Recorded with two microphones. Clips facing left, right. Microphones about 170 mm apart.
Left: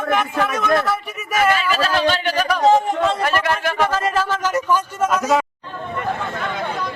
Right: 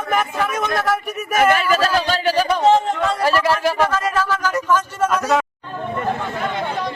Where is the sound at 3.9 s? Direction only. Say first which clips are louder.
Even; 30° left (ahead or behind); by 5.4 s centre (ahead or behind).